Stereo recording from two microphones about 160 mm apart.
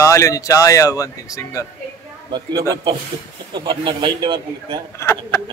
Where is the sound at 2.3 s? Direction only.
25° right (ahead or behind).